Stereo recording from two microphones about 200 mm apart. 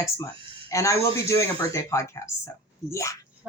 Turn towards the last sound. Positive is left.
turn(degrees=15)  # may be behind; listen again after turning